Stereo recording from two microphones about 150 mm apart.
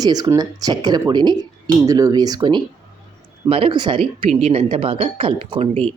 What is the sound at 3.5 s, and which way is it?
Speech, 40° right (ahead or behind).